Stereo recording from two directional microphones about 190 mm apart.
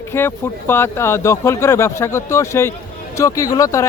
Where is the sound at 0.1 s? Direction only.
10° left (ahead or behind).